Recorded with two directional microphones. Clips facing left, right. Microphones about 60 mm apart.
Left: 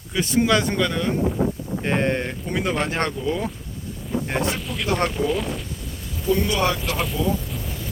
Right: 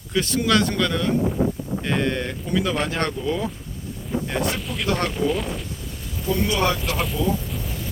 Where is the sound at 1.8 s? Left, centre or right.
Left.